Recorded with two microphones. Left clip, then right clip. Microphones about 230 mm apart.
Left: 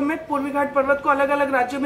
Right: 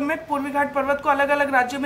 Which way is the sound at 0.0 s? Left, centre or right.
Right.